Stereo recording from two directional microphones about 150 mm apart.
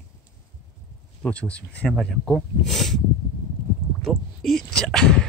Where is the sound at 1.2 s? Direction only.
10° left (ahead or behind).